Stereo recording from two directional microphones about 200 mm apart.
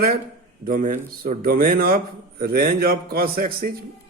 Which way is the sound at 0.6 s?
45° right (ahead or behind).